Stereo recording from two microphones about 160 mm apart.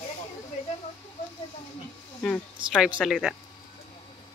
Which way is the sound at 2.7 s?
5° right (ahead or behind).